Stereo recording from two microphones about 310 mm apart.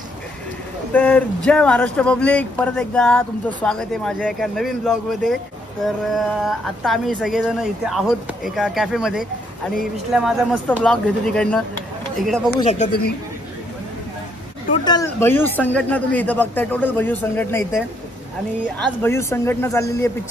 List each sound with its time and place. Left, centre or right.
0.9 s speech: centre
12.5 s speech: left
14.7 s speech: centre